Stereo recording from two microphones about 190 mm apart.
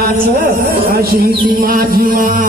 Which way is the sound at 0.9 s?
50° right (ahead or behind).